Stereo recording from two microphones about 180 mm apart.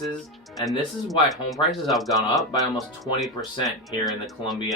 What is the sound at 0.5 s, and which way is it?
Speech, centre (ahead or behind).